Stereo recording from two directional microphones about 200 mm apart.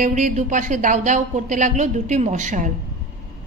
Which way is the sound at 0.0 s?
40° right (ahead or behind).